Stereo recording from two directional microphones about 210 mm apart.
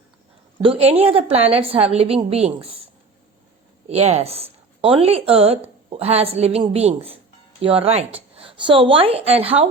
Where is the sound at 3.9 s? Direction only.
30° right (ahead or behind).